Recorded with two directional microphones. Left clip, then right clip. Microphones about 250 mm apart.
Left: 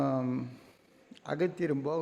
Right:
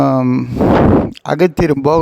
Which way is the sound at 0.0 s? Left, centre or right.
Right.